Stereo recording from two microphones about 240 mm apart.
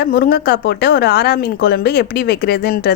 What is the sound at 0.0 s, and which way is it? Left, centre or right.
A woman's voice, left.